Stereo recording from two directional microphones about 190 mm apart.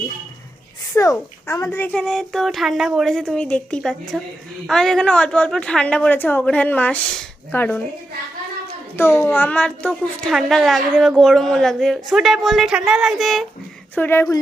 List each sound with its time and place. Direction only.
0.9 s a woman's voice: 15° left (ahead or behind)
9.0 s a woman's voice: 10° left (ahead or behind)
13.9 s speech: 10° left (ahead or behind)